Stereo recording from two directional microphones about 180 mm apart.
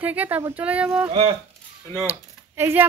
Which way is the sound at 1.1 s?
30° right (ahead or behind).